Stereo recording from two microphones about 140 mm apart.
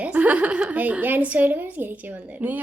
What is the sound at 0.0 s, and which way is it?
A woman's voice, 10° right (ahead or behind).